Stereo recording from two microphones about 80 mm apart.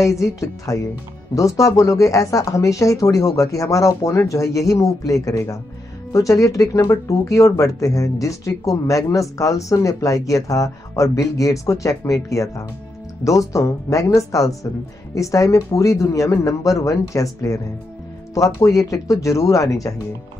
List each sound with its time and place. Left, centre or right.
0.0 s a woman's voice: left